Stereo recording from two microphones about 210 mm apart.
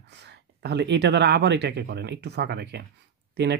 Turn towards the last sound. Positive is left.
turn(degrees=-55)  # may be behind; listen again after turning